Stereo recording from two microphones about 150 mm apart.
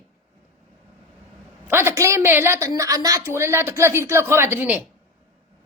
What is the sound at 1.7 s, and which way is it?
A woman's voice, 15° right (ahead or behind).